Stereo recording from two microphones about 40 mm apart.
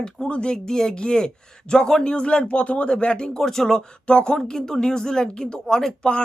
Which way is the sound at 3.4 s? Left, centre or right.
Centre.